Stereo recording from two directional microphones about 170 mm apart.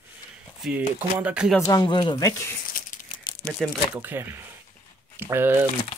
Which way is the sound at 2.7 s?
55° left (ahead or behind).